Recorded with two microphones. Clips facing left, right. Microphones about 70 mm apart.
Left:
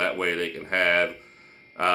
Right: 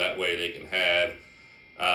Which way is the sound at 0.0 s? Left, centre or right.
Left.